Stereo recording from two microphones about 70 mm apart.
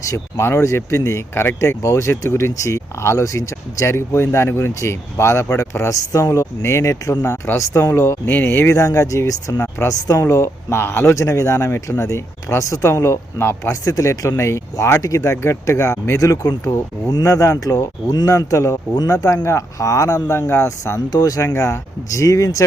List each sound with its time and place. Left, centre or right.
0.0 s speech: left
1.8 s speech: left
6.1 s speech: left
7.2 s speech: left
8.3 s speech: left
8.6 s speech: left
9.6 s speech: left
11.1 s speech: left
21.1 s speech: left
21.5 s speech: left